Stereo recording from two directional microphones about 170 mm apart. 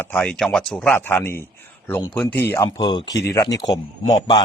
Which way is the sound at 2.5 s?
20° left (ahead or behind).